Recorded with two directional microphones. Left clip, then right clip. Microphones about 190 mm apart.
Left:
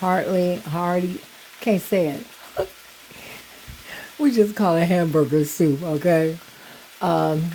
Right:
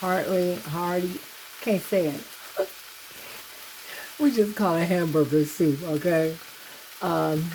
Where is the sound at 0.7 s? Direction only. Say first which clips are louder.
Left 4 dB; 25° left (ahead or behind).